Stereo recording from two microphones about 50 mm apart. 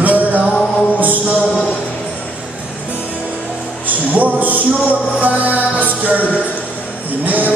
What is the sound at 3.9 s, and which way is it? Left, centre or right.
Music, right.